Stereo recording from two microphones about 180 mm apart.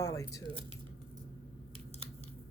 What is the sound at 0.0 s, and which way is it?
Speech, 20° left (ahead or behind).